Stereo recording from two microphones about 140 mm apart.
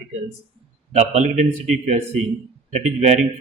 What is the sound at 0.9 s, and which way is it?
A man's voice, 55° right (ahead or behind).